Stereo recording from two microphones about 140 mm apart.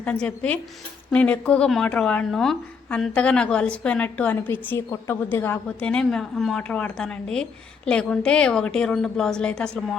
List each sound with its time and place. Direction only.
0.0 s a woman's voice: 10° left (ahead or behind)